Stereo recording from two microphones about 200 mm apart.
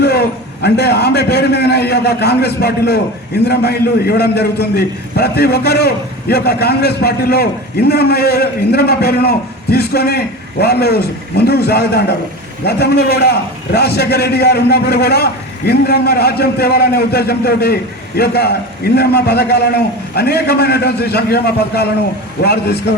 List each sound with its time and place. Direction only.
0.0 s a man's voice: 55° left (ahead or behind)